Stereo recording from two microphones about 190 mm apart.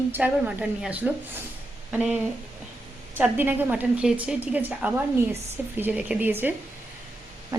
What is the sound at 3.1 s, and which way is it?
A woman's voice, 10° right (ahead or behind).